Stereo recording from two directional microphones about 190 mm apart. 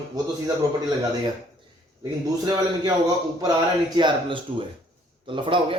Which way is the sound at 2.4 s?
20° right (ahead or behind).